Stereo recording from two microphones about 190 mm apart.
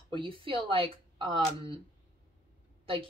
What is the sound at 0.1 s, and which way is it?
A woman's voice, 25° right (ahead or behind).